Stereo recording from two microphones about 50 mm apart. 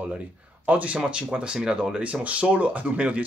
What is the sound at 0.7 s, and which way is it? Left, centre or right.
A man's voice, right.